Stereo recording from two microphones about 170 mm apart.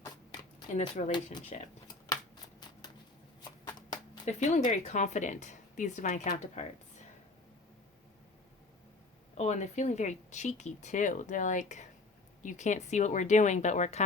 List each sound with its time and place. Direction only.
0.0 s zipper: 20° left (ahead or behind)
0.7 s speech: 45° left (ahead or behind)
1.1 s speech: 25° left (ahead or behind)
2.0 s shuffling cards: 25° left (ahead or behind)
4.3 s speech: 45° left (ahead or behind)
9.4 s speech: 45° left (ahead or behind)